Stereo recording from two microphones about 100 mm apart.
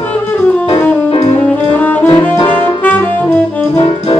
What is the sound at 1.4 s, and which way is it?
Saxophone, 15° left (ahead or behind).